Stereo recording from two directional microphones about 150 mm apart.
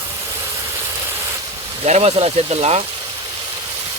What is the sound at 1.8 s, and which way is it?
Speech, 45° right (ahead or behind).